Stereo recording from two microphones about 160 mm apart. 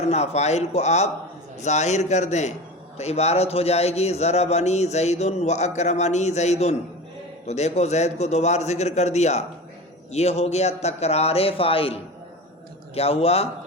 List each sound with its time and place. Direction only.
0.1 s a man's voice: 45° left (ahead or behind)